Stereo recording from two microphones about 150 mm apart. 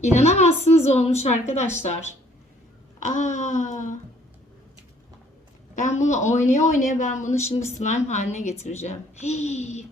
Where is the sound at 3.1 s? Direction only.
55° left (ahead or behind).